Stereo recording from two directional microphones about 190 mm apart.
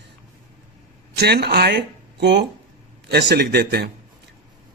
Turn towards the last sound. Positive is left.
turn(degrees=-55)  # may be behind; listen again after turning